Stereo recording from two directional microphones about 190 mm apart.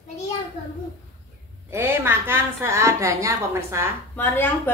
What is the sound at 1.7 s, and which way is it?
A woman's voice, 15° right (ahead or behind).